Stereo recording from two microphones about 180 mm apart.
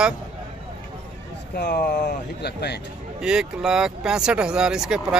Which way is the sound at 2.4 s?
65° left (ahead or behind).